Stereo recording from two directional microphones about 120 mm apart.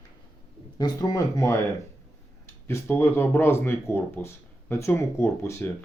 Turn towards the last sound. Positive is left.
turn(degrees=25)  # may be behind; listen again after turning